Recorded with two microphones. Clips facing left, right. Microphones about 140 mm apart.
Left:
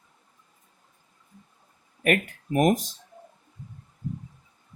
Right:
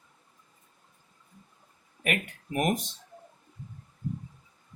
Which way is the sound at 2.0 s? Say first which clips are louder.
Left 7 dB; 40° left (ahead or behind).